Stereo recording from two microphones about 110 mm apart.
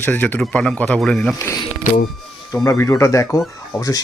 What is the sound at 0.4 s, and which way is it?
Speech, 5° left (ahead or behind).